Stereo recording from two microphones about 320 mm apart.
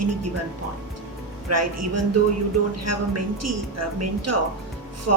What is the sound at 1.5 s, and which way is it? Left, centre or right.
A woman's voice, right.